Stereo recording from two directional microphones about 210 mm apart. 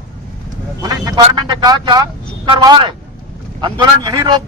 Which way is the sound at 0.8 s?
15° right (ahead or behind).